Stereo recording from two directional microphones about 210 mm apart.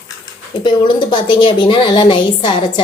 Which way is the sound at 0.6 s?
20° left (ahead or behind).